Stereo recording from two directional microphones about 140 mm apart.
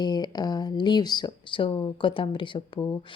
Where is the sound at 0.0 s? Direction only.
30° left (ahead or behind).